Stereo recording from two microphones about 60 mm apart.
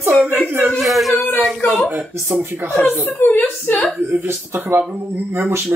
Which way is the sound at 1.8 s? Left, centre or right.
Right.